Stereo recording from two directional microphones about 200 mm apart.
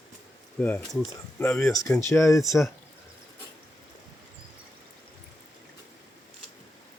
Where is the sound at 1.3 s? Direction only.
10° left (ahead or behind).